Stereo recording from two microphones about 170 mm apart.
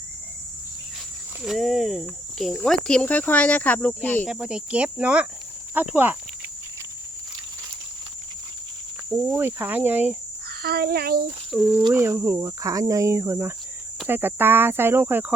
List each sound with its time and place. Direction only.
1.4 s speech: centre (ahead or behind)
4.3 s speech: 5° right (ahead or behind)
9.0 s speech: 15° right (ahead or behind)
10.6 s a child's voice: 65° right (ahead or behind)
11.5 s speech: 5° right (ahead or behind)